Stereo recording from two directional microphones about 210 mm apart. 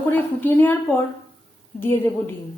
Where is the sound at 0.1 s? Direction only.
10° left (ahead or behind).